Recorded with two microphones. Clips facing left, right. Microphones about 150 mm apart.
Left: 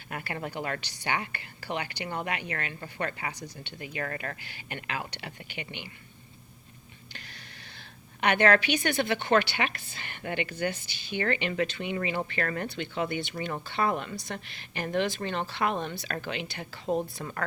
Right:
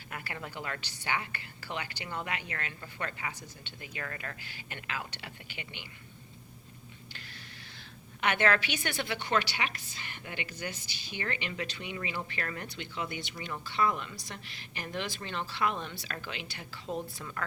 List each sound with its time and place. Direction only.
0.1 s a woman's voice: 55° left (ahead or behind)
7.8 s a woman's voice: 60° left (ahead or behind)